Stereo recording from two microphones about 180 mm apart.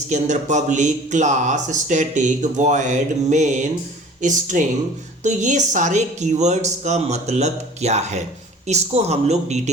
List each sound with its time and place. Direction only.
0.1 s speech: 40° right (ahead or behind)